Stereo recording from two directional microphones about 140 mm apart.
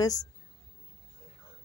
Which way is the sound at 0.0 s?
25° left (ahead or behind).